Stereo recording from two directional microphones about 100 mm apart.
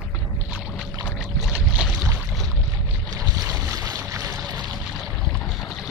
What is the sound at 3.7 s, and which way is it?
Boat, 40° right (ahead or behind).